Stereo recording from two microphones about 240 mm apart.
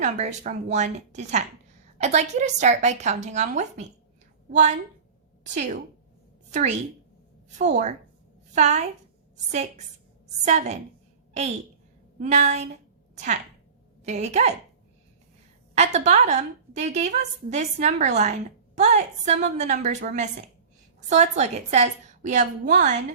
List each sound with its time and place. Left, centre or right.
0.0 s a woman's voice: right
5.4 s a woman's voice: right
15.7 s a woman's voice: right